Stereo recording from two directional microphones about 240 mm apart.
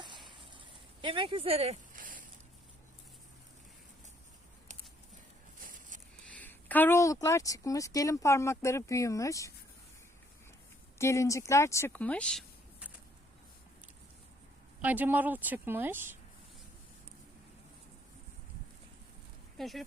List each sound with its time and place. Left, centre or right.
0.0 s a sound: centre
1.0 s speech: right
5.5 s a sound: right
6.3 s speech: centre
10.9 s speech: centre
14.8 s a woman's voice: centre
19.5 s speech: centre